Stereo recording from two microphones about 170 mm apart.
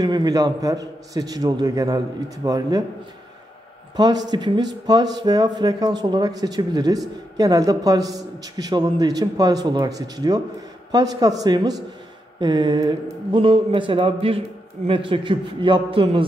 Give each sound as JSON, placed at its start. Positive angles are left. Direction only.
{"t": 0.0, "sound": "a man's voice", "side_deg": -25}
{"t": 3.9, "sound": "a man's voice", "side_deg": -25}